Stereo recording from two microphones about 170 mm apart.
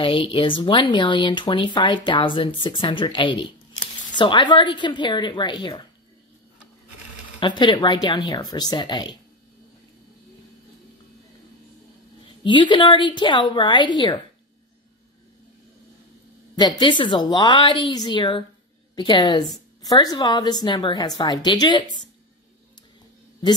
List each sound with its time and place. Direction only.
0.0 s speech: 30° left (ahead or behind)
7.3 s speech: 25° left (ahead or behind)
12.4 s speech: 30° left (ahead or behind)
16.5 s speech: 25° left (ahead or behind)